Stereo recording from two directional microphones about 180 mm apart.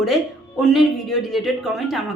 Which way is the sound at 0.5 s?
Centre (ahead or behind).